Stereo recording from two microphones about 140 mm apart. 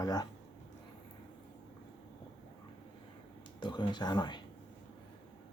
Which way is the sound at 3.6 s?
30° left (ahead or behind).